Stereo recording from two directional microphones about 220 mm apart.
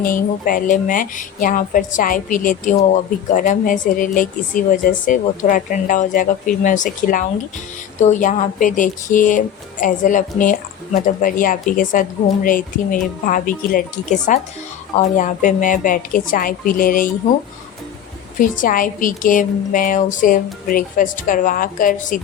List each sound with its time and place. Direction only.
0.0 s speech: 40° left (ahead or behind)
18.3 s speech: 35° left (ahead or behind)